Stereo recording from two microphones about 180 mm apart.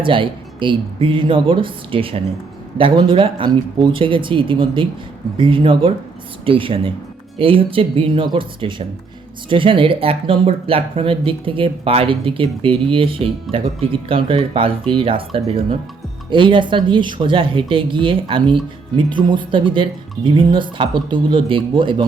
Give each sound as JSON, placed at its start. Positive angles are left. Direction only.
{"t": 0.0, "sound": "speech", "side_deg": -30}